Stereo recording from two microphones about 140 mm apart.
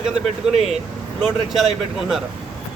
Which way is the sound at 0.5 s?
50° right (ahead or behind).